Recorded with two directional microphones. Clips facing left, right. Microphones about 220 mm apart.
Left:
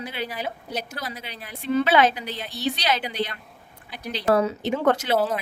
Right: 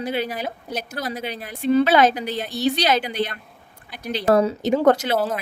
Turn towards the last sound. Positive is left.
turn(degrees=0)  # may be behind; listen again after turning